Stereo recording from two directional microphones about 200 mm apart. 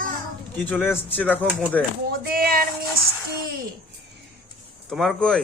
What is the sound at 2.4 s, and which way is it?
Speech, 45° right (ahead or behind).